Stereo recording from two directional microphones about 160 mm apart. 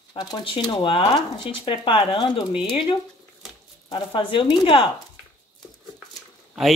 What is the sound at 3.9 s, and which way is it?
Speech, 35° left (ahead or behind).